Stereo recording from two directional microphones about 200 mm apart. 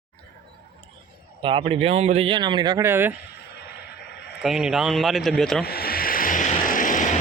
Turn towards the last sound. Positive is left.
turn(degrees=40)  # may be behind; listen again after turning